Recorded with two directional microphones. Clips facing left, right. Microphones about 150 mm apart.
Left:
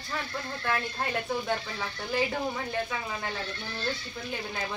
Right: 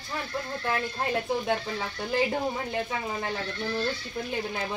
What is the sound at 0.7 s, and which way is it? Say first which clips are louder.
Speech: right 1 dB; 20° right (ahead or behind).